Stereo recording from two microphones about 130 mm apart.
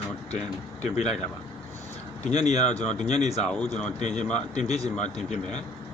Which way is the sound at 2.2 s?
60° left (ahead or behind).